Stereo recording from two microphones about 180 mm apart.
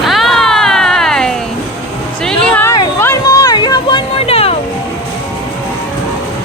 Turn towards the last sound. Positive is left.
turn(degrees=35)  # may be behind; listen again after turning